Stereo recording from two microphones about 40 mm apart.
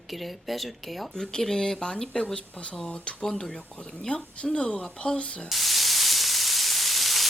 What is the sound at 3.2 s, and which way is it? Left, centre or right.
Speech, centre.